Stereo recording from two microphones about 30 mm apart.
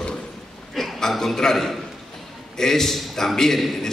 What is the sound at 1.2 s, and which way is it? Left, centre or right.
A man's voice, centre.